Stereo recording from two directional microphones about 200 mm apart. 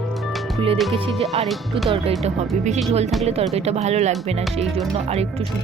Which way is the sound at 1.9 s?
30° right (ahead or behind).